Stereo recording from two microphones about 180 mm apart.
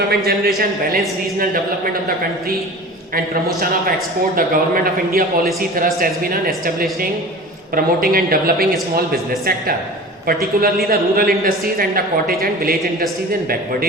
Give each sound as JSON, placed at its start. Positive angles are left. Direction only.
{"t": 0.3, "sound": "a woman's voice", "side_deg": -55}
{"t": 4.4, "sound": "a man's voice", "side_deg": -50}
{"t": 10.8, "sound": "a woman's voice", "side_deg": -55}